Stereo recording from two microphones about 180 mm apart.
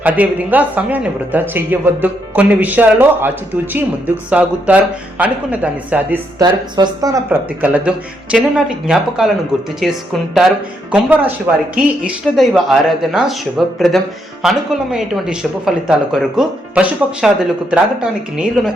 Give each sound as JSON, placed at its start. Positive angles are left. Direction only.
{"t": 0.0, "sound": "speech", "side_deg": -10}
{"t": 6.4, "sound": "a man's voice", "side_deg": -25}